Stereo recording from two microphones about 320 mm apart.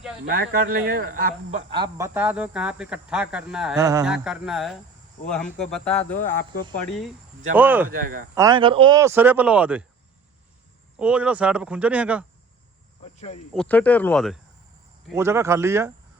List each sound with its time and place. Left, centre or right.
0.3 s a man's voice: right; by 6.0 s centre
6.4 s speech: left
6.7 s a man's voice: centre
7.9 s speech: right
8.4 s a man's voice: centre
10.9 s a man's voice: centre
13.1 s speech: centre
13.5 s a man's voice: centre
15.0 s a man's voice: centre